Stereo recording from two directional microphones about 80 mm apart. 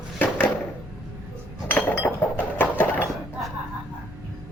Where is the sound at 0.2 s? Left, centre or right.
Left.